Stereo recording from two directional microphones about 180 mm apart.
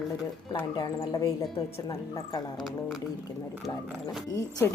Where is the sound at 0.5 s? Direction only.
25° left (ahead or behind).